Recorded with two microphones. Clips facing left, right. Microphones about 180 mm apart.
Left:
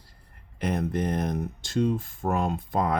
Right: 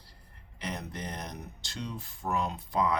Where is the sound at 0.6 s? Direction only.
50° left (ahead or behind).